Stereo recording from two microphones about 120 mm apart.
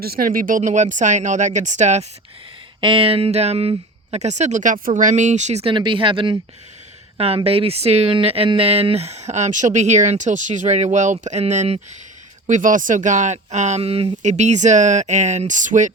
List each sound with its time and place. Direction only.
0.4 s speech: 90° right; by 2.0 s 75° right (ahead or behind)
2.8 s speech: 50° right (ahead or behind); by 5.7 s 70° right (ahead or behind)
5.7 s speech: 45° right (ahead or behind); by 11.9 s 70° right (ahead or behind)
12.5 s speech: 90° right; by 14.1 s 55° right (ahead or behind)
14.2 s speech: 70° right (ahead or behind); by 15.9 s 90° right